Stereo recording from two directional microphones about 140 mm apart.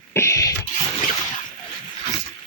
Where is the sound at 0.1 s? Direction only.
20° left (ahead or behind).